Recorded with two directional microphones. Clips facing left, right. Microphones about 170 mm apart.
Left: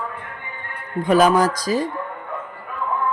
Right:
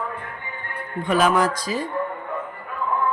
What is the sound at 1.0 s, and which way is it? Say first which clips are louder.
Speech: left 4 dB; 40° left (ahead or behind).